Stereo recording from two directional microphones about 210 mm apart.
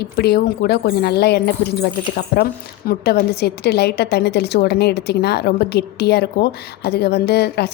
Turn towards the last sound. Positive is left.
turn(degrees=50)  # may be behind; listen again after turning